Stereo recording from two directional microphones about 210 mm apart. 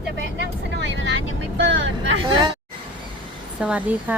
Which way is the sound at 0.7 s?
60° right (ahead or behind).